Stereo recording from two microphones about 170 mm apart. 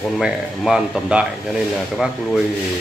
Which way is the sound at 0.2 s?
5° right (ahead or behind).